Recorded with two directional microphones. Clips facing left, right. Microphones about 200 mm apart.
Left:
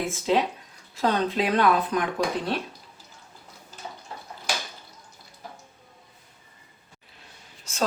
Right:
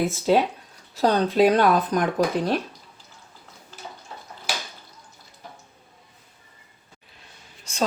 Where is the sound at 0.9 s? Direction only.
40° right (ahead or behind).